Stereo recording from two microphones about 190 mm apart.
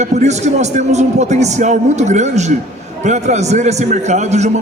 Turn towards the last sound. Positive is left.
turn(degrees=-35)  # may be behind; listen again after turning